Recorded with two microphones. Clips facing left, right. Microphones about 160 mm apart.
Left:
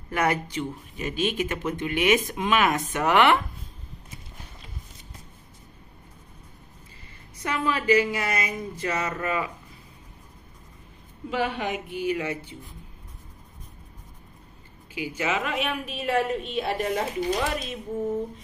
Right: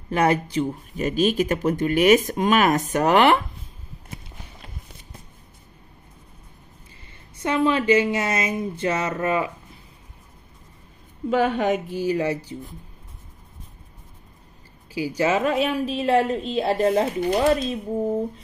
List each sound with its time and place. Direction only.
0.1 s speech: 30° right (ahead or behind)
7.4 s speech: 25° right (ahead or behind)
11.2 s speech: 45° right (ahead or behind)
15.0 s speech: 35° right (ahead or behind)